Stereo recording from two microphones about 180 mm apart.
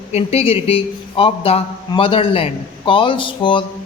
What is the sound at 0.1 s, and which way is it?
A man's voice, 35° left (ahead or behind).